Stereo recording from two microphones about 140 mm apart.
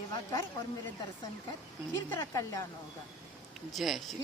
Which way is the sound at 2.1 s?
20° left (ahead or behind).